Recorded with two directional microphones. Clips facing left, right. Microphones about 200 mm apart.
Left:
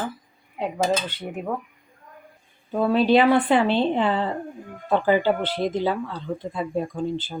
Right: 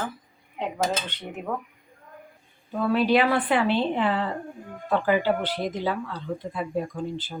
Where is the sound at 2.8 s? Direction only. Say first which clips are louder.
Left 3 dB; 25° left (ahead or behind).